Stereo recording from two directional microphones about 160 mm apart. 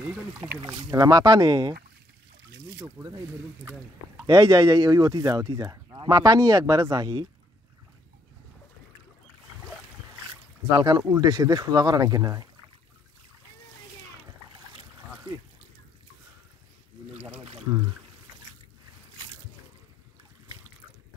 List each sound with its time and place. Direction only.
0.4 s speech: 15° right (ahead or behind)
2.8 s speech: 25° right (ahead or behind)
4.3 s speech: 20° right (ahead or behind)
10.7 s speech: 25° right (ahead or behind)